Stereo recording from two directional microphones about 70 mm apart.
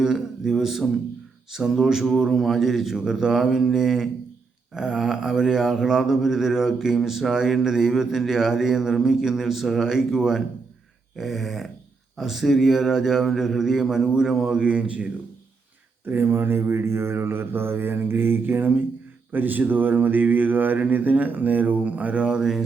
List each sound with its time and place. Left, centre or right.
0.0 s a man's voice: centre
1.5 s mantra: centre
16.0 s mantra: right
19.3 s a sound: right; by 22.6 s centre